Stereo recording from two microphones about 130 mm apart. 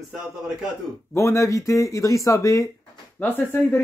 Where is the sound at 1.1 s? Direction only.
25° left (ahead or behind).